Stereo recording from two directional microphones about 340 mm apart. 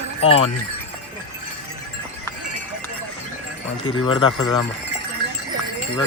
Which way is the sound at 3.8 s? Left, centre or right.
Centre.